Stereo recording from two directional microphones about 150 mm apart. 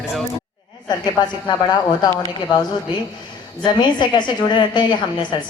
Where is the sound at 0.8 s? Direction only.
30° left (ahead or behind).